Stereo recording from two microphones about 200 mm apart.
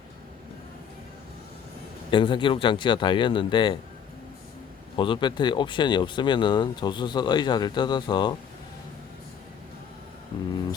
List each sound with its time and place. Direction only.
2.0 s speech: 25° left (ahead or behind)
4.9 s speech: 25° left (ahead or behind)